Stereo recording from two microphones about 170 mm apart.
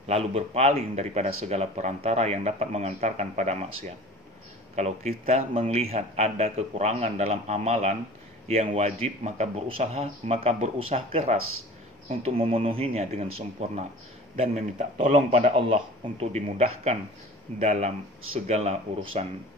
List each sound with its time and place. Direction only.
0.1 s speech: 35° right (ahead or behind)
4.7 s speech: 40° right (ahead or behind)